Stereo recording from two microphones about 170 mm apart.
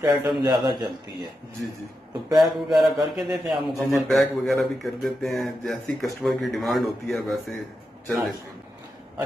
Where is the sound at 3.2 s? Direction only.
5° right (ahead or behind).